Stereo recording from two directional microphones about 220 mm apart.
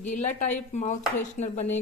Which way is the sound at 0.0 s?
35° left (ahead or behind).